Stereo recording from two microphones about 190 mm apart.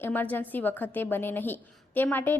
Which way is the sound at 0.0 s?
10° left (ahead or behind).